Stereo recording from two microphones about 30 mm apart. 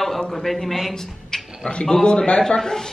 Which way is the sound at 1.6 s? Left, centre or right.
Left.